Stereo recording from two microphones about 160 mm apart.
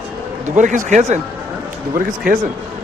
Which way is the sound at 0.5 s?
50° right (ahead or behind).